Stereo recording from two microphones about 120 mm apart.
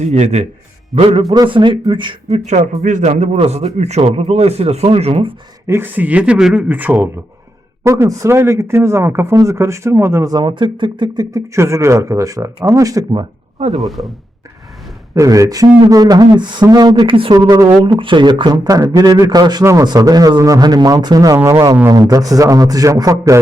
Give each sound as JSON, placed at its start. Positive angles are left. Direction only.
{"t": 0.0, "sound": "a man's voice", "side_deg": -65}
{"t": 1.5, "sound": "speech", "side_deg": -45}
{"t": 2.5, "sound": "a man's voice", "side_deg": -90}
{"t": 5.6, "sound": "speech", "side_deg": -20}
{"t": 10.3, "sound": "speech", "side_deg": -40}
{"t": 11.3, "sound": "speech", "side_deg": -25}
{"t": 13.8, "sound": "speech", "side_deg": 0}
{"t": 15.1, "sound": "speech", "side_deg": -25}
{"t": 17.3, "sound": "speech", "side_deg": -35}